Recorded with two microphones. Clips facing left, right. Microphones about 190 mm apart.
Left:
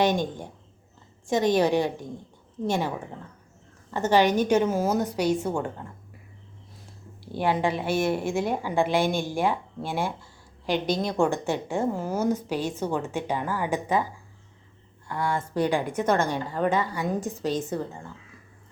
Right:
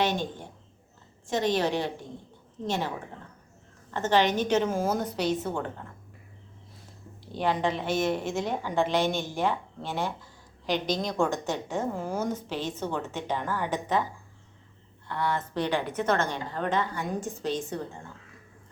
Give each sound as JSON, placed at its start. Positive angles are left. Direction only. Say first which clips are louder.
{"t": 0.0, "sound": "a woman's voice", "louder": "left 4 dB", "side_deg": 15}
{"t": 3.9, "sound": "a woman's voice", "louder": "left 3 dB", "side_deg": 10}
{"t": 7.3, "sound": "a woman's voice", "louder": "left 2 dB", "side_deg": 10}
{"t": 15.0, "sound": "a woman's voice", "louder": "left 1 dB", "side_deg": 10}